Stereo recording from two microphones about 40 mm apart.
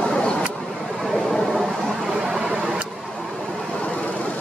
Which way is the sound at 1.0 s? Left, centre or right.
Centre.